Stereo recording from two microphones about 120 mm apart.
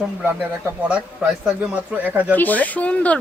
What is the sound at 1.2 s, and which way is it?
Speech, 5° right (ahead or behind).